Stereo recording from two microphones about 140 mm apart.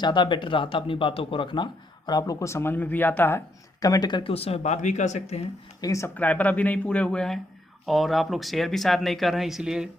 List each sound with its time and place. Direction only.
0.0 s speech: 30° left (ahead or behind); by 5.5 s 50° left (ahead or behind)
5.8 s speech: 20° left (ahead or behind)
6.1 s speech: 10° left (ahead or behind)